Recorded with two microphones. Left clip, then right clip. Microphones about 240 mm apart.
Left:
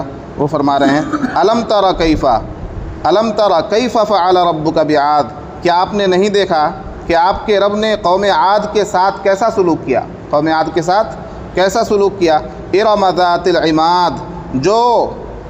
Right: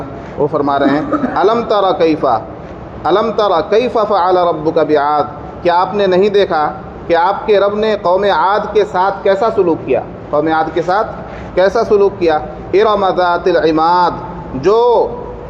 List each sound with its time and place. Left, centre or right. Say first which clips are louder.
0.4 s a man's voice: left 1 dB; left